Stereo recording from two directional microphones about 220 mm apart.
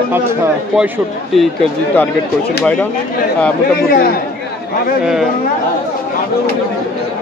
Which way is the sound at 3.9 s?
40° left (ahead or behind).